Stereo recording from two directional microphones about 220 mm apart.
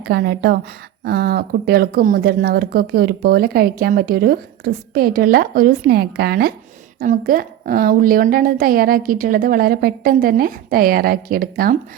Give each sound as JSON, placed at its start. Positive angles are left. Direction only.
{"t": 0.0, "sound": "a woman's voice", "side_deg": -45}